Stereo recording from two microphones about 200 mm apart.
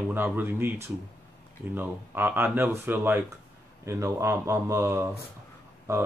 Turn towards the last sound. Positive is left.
turn(degrees=-15)  # may be behind; listen again after turning